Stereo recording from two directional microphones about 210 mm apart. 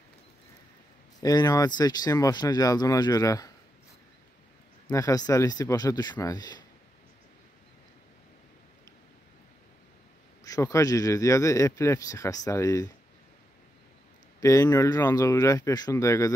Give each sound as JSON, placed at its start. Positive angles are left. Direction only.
{"t": 1.2, "sound": "a man's voice", "side_deg": 15}
{"t": 4.8, "sound": "speech", "side_deg": 15}
{"t": 10.4, "sound": "a man's voice", "side_deg": 15}
{"t": 14.4, "sound": "a man's voice", "side_deg": 15}